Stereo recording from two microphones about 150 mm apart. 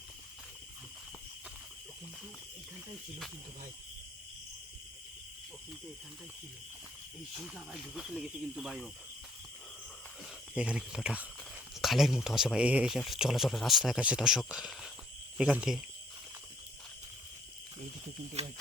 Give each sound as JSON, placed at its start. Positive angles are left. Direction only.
{"t": 7.3, "sound": "speech", "side_deg": -5}
{"t": 10.5, "sound": "speech", "side_deg": -5}
{"t": 18.4, "sound": "speech", "side_deg": -45}